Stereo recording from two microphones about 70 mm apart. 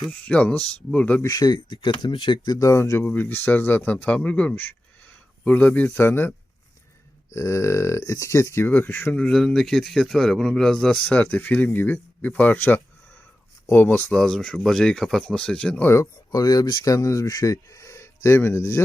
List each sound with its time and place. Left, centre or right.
0.1 s speech: centre
1.3 s speech: left
2.6 s speech: left
3.0 s speech: left
7.3 s speech: left
8.6 s speech: left
9.2 s a man's voice: centre
11.0 s speech: centre
14.1 s speech: centre
16.3 s speech: left
16.8 s speech: left